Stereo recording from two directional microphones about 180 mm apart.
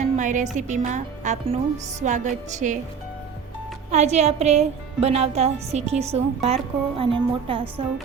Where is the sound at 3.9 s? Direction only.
40° right (ahead or behind).